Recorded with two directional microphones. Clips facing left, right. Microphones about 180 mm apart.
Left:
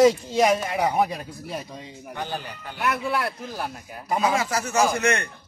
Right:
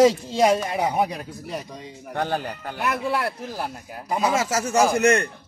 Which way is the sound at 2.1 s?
60° right (ahead or behind).